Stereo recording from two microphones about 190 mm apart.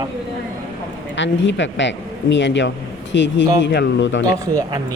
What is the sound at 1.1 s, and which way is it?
Speech, 70° left (ahead or behind).